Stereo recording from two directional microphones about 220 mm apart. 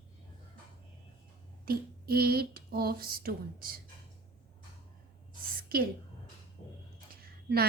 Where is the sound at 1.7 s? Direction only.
45° right (ahead or behind).